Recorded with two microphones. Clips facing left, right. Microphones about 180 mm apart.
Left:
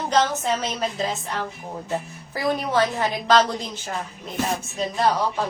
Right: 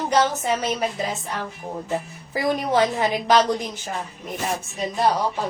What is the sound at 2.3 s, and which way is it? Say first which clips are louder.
A woman's voice: right 1 dB; 15° right (ahead or behind).